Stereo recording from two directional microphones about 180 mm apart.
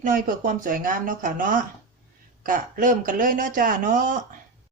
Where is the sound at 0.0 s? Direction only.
45° right (ahead or behind).